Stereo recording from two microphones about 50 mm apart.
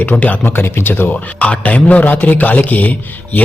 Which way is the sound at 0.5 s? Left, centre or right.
Left.